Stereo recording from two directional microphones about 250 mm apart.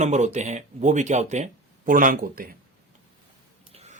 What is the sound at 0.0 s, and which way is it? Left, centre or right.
Speech, right.